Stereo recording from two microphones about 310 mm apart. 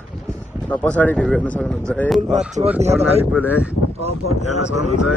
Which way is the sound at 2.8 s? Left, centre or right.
Right.